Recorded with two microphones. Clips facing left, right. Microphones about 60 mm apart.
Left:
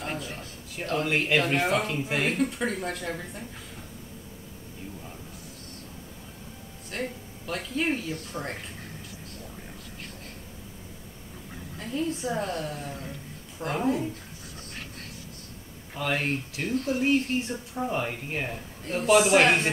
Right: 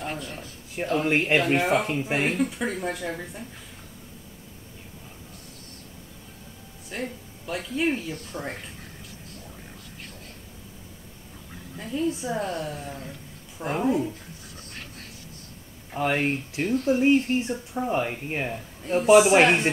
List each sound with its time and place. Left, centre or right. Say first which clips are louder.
0.0 s speech: right 1 dB; centre
1.0 s speech: right 2 dB; right
1.4 s speech: right 3 dB; centre
1.8 s speech: right 2 dB; right
2.3 s speech: right 1 dB; centre
6.9 s speech: even; centre
11.9 s speech: right 2 dB; centre
14.5 s a sound: left 2 dB; centre
16.0 s speech: right 4 dB; right; by 19.5 s centre